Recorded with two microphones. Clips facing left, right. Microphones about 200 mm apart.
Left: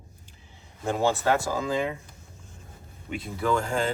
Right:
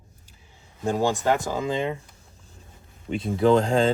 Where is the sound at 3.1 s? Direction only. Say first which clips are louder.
Right 8 dB; 25° right (ahead or behind).